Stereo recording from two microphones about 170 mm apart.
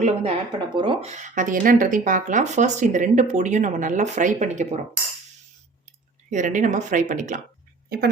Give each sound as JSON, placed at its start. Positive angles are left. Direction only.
{"t": 0.0, "sound": "speech", "side_deg": -35}
{"t": 1.0, "sound": "speech", "side_deg": -45}
{"t": 6.3, "sound": "speech", "side_deg": -50}